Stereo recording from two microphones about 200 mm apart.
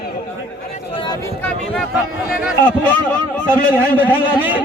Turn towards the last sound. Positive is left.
turn(degrees=-10)  # may be behind; listen again after turning